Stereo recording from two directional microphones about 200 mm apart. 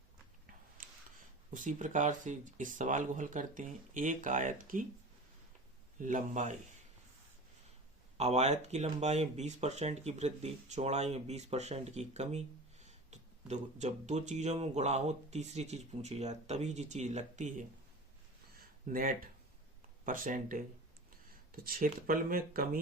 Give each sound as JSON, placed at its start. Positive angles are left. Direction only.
{"t": 0.8, "sound": "a sound", "side_deg": -45}
{"t": 1.5, "sound": "speech", "side_deg": -40}
{"t": 6.0, "sound": "speech", "side_deg": -40}
{"t": 8.2, "sound": "speech", "side_deg": -30}
{"t": 18.9, "sound": "speech", "side_deg": -45}